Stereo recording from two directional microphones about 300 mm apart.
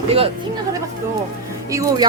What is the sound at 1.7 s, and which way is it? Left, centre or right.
Speech, centre.